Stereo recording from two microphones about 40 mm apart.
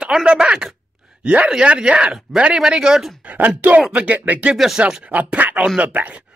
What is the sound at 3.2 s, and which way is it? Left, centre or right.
Speech, right.